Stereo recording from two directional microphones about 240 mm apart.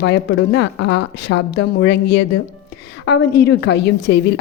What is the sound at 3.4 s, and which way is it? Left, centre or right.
Speech, left.